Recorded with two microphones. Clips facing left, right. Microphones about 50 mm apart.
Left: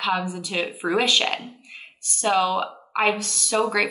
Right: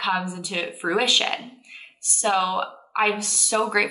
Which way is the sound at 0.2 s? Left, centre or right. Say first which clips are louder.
Left 1 dB; centre.